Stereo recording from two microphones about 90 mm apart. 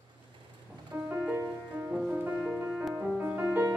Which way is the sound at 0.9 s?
20° right (ahead or behind).